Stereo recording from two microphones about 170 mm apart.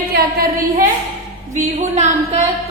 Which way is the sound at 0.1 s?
65° right (ahead or behind).